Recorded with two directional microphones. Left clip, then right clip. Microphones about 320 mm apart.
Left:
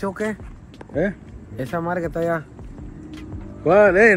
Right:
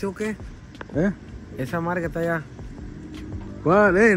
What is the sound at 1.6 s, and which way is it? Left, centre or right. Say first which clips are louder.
Speech: left 2 dB; centre.